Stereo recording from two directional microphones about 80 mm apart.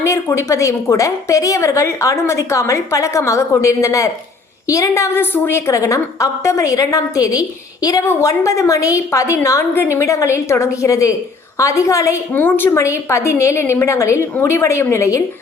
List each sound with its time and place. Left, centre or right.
0.0 s a woman's voice: left
8.0 s a woman's voice: left
12.3 s a woman's voice: left
12.7 s a woman's voice: left